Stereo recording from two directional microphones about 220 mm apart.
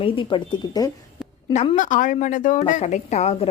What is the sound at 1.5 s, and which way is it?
A woman's voice, 30° left (ahead or behind).